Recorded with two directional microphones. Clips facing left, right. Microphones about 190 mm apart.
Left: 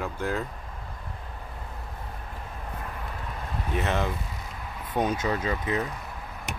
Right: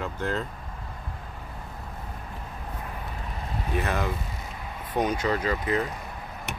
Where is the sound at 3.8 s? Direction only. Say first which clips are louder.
Left 1 dB; 25° left (ahead or behind).